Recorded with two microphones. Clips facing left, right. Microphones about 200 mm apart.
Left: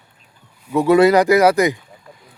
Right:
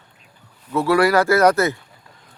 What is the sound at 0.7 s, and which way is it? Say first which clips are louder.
Speech: left 5 dB; 15° left (ahead or behind).